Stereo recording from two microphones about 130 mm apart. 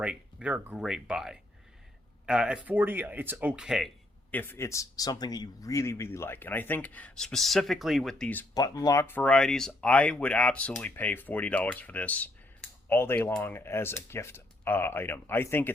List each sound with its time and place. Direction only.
0.0 s speech: 10° right (ahead or behind)
4.3 s speech: 15° left (ahead or behind); by 8.3 s centre (ahead or behind)
8.5 s speech: 30° left (ahead or behind)